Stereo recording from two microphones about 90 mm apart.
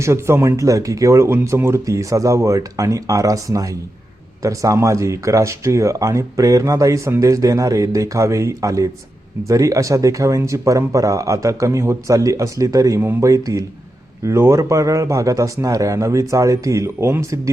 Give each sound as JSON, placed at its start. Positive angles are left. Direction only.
{"t": 0.0, "sound": "speech", "side_deg": -30}
{"t": 13.0, "sound": "speech", "side_deg": -30}